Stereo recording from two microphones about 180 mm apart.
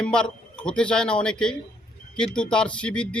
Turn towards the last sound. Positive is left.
turn(degrees=5)  # may be behind; listen again after turning